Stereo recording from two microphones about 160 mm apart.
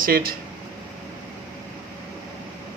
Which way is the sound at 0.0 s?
65° right (ahead or behind).